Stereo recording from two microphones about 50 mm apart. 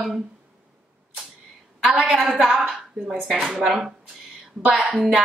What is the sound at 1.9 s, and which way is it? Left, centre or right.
Speech, right.